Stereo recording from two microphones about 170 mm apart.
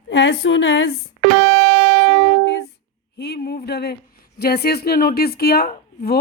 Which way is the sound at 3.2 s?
70° left (ahead or behind).